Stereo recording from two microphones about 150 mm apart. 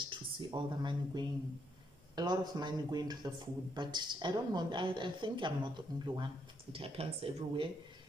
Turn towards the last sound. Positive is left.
turn(degrees=-35)  # may be behind; listen again after turning